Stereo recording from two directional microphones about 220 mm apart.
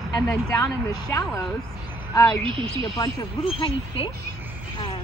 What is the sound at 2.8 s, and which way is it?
Speech, 20° left (ahead or behind).